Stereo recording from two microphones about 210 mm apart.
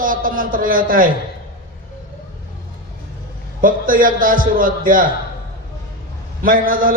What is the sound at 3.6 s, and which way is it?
A man's voice, 40° right (ahead or behind).